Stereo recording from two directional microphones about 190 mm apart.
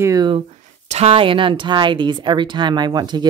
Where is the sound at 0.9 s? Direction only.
35° right (ahead or behind).